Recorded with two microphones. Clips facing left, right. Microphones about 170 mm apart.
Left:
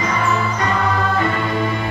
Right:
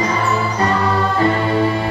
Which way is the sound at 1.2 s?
35° right (ahead or behind).